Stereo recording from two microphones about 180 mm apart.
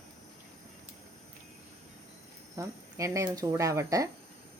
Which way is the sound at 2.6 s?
15° right (ahead or behind).